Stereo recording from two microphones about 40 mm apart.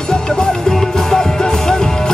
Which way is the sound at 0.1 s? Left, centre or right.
Centre.